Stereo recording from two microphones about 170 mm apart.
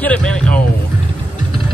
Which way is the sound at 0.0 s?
5° left (ahead or behind).